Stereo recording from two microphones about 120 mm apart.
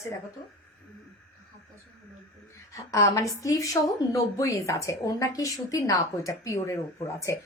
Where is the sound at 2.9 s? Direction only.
25° left (ahead or behind).